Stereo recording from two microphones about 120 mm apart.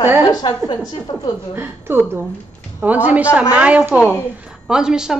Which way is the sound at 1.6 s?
20° right (ahead or behind).